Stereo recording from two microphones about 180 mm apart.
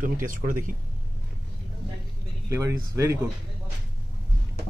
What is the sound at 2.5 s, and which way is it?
Speech, 15° right (ahead or behind).